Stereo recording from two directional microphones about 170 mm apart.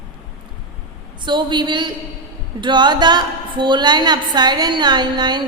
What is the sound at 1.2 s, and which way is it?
A woman's voice, 25° right (ahead or behind).